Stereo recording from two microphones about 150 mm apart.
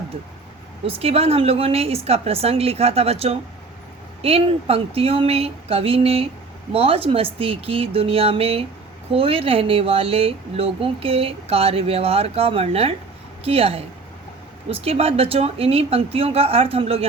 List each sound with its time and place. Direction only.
0.9 s speech: 40° right (ahead or behind)